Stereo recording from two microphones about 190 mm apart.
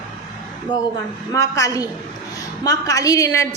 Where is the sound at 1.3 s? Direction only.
15° left (ahead or behind).